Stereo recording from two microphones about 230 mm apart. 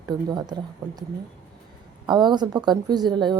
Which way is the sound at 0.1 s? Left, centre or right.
Centre.